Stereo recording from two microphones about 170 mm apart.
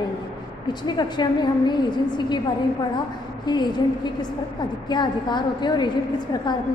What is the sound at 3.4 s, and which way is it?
Speech, 25° left (ahead or behind).